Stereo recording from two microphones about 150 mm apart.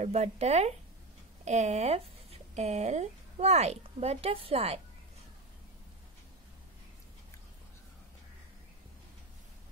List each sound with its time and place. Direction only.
0.0 s speech: 45° right (ahead or behind)